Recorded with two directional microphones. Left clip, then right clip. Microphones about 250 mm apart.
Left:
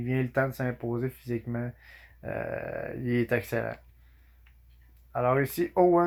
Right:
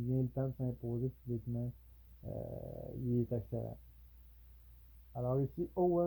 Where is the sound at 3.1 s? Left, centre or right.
Left.